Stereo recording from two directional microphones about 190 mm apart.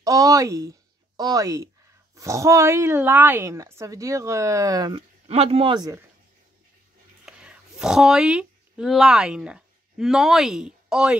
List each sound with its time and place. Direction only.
0.0 s speech: 20° right (ahead or behind)
5.3 s a man's voice: 30° right (ahead or behind)
7.2 s speech: 5° right (ahead or behind)